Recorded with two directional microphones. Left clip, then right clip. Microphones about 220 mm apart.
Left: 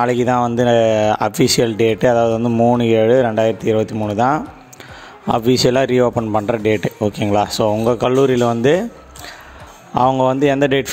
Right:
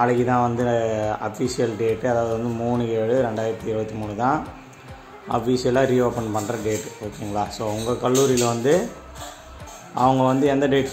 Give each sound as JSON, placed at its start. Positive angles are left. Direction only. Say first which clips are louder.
{"t": 0.0, "sound": "speech", "louder": "left 4 dB", "side_deg": 45}
{"t": 9.9, "sound": "speech", "louder": "left 4 dB", "side_deg": 40}